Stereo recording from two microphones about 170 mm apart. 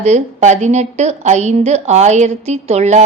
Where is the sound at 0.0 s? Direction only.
45° right (ahead or behind).